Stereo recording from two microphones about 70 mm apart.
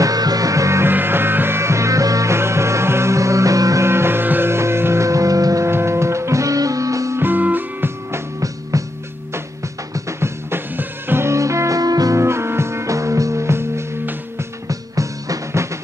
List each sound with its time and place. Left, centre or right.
0.0 s music: right
2.3 s music: right
3.8 s music: right
5.7 s music: right
7.2 s music: right
8.7 s music: right
9.9 s music: right
12.2 s music: right
14.7 s music: right